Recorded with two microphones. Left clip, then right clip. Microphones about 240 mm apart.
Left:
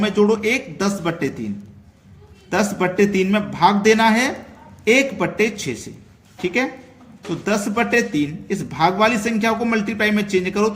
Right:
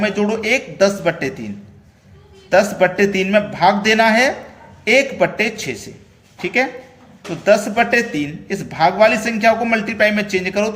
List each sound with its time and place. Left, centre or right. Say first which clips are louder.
0.0 s a man's voice: left 1 dB; left
2.5 s a man's voice: right 7 dB; centre